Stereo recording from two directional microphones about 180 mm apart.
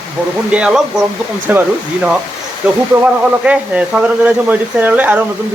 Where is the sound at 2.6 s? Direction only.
5° right (ahead or behind).